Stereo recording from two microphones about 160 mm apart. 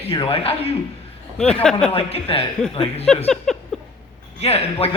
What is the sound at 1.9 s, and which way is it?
A man's voice, 35° left (ahead or behind).